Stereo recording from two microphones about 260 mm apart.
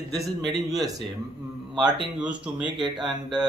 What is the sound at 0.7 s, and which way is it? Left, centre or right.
Speech, centre.